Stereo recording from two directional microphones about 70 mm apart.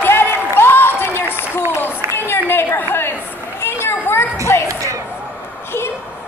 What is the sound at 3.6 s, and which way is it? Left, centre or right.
Children playing, left.